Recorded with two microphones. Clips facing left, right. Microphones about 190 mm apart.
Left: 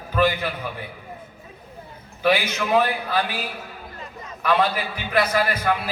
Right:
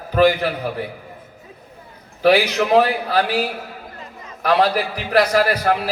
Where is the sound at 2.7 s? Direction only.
75° right (ahead or behind).